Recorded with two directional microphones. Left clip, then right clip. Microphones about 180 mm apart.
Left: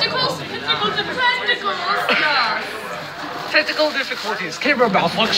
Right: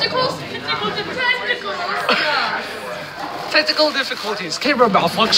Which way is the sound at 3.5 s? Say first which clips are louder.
Right 1 dB; 15° right (ahead or behind).